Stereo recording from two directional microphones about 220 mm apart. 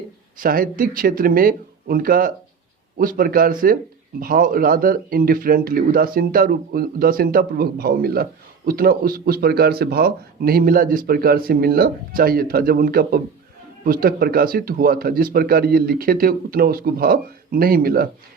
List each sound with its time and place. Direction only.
0.3 s speech: 40° right (ahead or behind)